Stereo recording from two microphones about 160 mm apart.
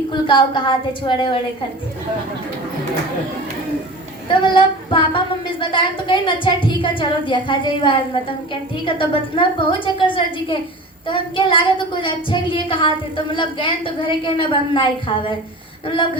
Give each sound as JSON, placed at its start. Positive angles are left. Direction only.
{"t": 0.1, "sound": "a woman's voice", "side_deg": 30}
{"t": 4.3, "sound": "a woman's voice", "side_deg": 30}